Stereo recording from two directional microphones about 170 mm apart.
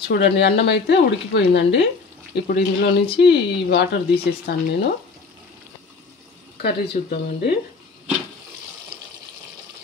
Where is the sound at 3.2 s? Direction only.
85° left.